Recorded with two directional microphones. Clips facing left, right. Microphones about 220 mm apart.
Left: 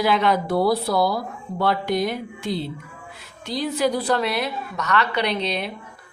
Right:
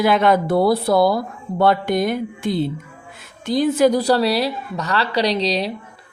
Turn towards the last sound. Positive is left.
turn(degrees=-35)  # may be behind; listen again after turning